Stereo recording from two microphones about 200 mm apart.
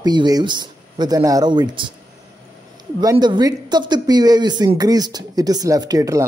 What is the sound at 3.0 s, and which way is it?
Speech, 20° right (ahead or behind).